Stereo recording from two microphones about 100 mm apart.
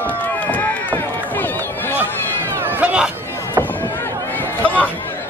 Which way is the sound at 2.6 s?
20° right (ahead or behind).